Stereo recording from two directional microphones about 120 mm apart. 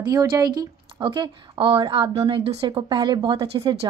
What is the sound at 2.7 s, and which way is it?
A woman's voice, 40° right (ahead or behind).